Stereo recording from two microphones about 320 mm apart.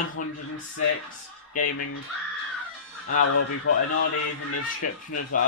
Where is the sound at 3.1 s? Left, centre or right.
Left.